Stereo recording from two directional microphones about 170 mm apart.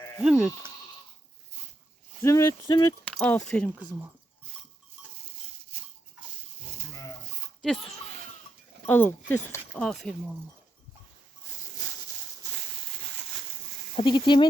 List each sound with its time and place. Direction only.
0.2 s speech: 5° right (ahead or behind)
2.2 s speech: 15° left (ahead or behind)
3.0 s speech: 5° left (ahead or behind)
5.7 s a sound: 35° right (ahead or behind)
8.9 s speech: 10° left (ahead or behind)
13.9 s speech: 30° left (ahead or behind)